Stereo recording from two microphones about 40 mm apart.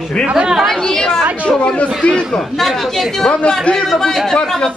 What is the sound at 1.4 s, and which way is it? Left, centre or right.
Speech, left.